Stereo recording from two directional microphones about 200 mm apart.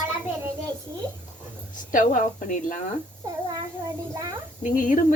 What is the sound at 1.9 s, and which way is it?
Speech, 40° left (ahead or behind).